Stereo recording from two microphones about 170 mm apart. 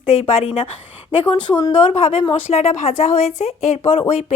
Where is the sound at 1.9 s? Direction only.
40° left (ahead or behind).